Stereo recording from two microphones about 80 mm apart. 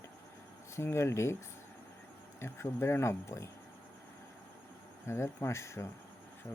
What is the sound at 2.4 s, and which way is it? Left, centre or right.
Speech, left.